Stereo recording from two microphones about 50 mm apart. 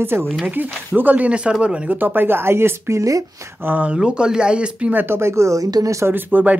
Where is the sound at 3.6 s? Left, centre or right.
Right.